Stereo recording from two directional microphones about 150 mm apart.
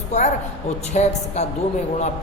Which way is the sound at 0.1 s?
50° left (ahead or behind).